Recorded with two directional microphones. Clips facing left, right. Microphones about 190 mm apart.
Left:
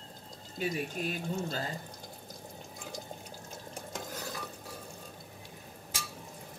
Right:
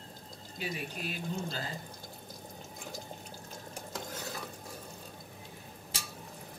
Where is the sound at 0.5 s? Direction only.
45° left (ahead or behind).